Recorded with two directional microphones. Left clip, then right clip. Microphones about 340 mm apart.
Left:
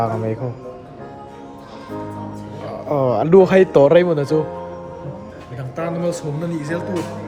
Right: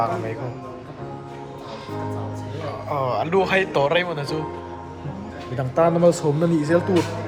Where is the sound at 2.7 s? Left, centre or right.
Left.